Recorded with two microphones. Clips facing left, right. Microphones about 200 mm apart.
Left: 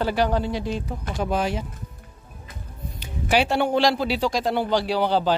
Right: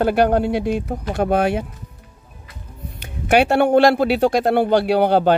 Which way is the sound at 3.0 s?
60° right (ahead or behind).